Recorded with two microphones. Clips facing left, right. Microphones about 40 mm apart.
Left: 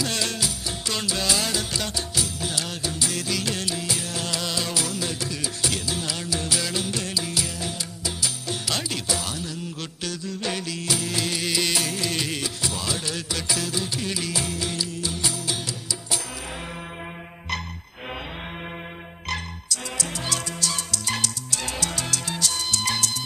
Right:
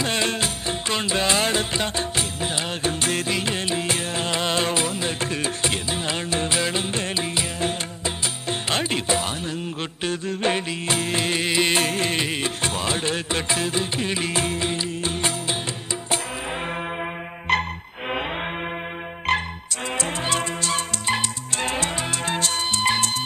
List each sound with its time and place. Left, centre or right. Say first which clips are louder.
0.0 s music: right 4 dB; right
17.5 s music: right 9 dB; right
19.3 s music: right 7 dB; right